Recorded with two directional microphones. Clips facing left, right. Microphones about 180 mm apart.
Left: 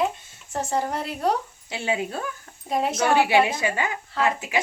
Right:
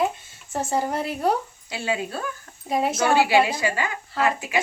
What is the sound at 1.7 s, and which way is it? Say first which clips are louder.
Speech: even; 20° left (ahead or behind).